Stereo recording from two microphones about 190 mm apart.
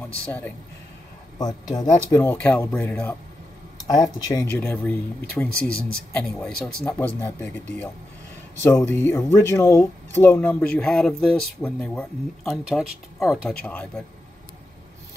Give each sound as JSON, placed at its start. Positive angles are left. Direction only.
{"t": 1.4, "sound": "speech", "side_deg": 20}
{"t": 2.2, "sound": "speech", "side_deg": 5}
{"t": 3.7, "sound": "speech", "side_deg": 20}
{"t": 4.6, "sound": "a man's voice", "side_deg": 5}
{"t": 8.6, "sound": "a man's voice", "side_deg": 10}